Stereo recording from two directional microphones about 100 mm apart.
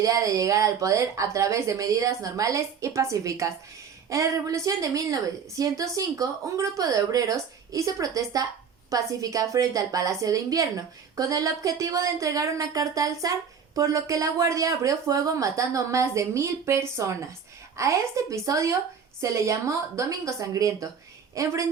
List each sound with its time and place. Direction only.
0.0 s a woman's voice: 35° right (ahead or behind)